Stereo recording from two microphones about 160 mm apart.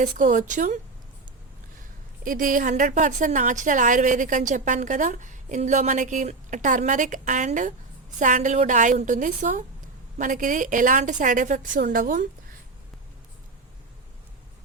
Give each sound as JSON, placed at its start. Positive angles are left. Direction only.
{"t": 0.0, "sound": "a woman's voice", "side_deg": -55}
{"t": 2.2, "sound": "a woman's voice", "side_deg": -60}